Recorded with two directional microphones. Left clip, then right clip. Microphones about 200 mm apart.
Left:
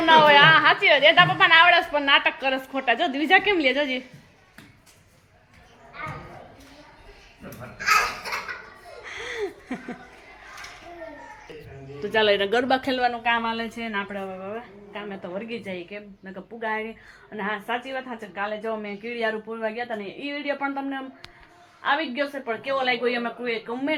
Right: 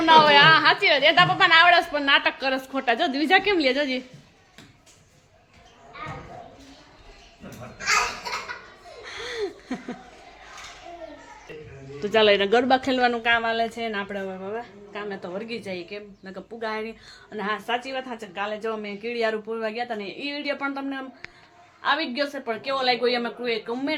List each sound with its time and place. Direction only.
0.0 s a woman's voice: 10° right (ahead or behind)
9.1 s a sound: 15° right (ahead or behind)
11.9 s speech: 20° right (ahead or behind)
13.0 s speech: 45° right (ahead or behind)
13.4 s speech: 30° right (ahead or behind)
13.7 s a woman's voice: 20° right (ahead or behind)